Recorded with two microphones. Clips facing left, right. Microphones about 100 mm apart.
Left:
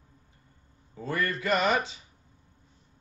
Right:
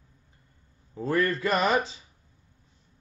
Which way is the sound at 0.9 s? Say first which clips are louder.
Right 5 dB; 35° right (ahead or behind).